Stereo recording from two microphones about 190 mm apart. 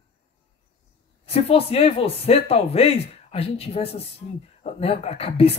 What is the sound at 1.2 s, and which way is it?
Speech, 30° left (ahead or behind).